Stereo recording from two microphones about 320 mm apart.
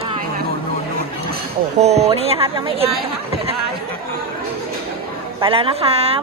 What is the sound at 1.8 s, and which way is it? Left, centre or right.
Speech, centre.